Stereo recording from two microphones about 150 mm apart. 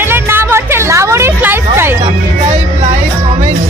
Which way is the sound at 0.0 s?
15° right (ahead or behind).